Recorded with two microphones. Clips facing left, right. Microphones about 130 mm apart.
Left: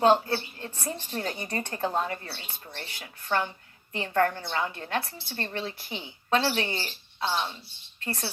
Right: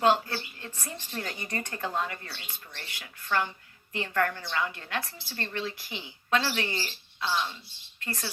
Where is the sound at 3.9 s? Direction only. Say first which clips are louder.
Left 3 dB; 30° left (ahead or behind).